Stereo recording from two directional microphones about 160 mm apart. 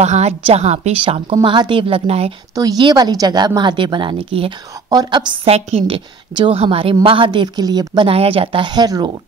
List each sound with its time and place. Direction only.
0.0 s a woman's voice: 45° right (ahead or behind)
1.3 s a woman's voice: 30° right (ahead or behind)
2.5 s a woman's voice: 25° right (ahead or behind)